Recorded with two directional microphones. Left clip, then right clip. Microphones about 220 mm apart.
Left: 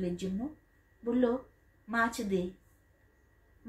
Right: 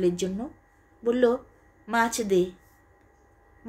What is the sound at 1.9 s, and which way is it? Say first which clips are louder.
Speech: right 7 dB; 45° right (ahead or behind).